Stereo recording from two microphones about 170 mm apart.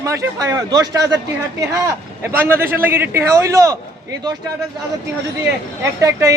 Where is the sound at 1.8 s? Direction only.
15° right (ahead or behind).